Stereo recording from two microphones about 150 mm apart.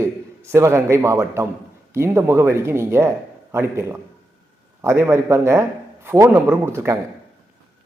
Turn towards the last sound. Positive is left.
turn(degrees=-15)  # may be behind; listen again after turning